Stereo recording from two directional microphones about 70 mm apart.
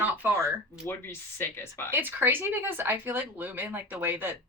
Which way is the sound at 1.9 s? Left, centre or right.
Right.